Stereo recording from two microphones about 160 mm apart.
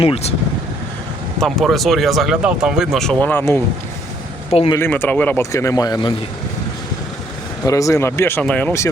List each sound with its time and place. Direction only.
0.0 s speech: 40° left (ahead or behind)
1.4 s speech: centre (ahead or behind)
4.7 s speech: 15° left (ahead or behind)
7.6 s speech: 20° left (ahead or behind)